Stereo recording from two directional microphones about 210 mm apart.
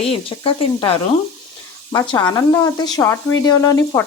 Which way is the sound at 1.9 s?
20° left (ahead or behind).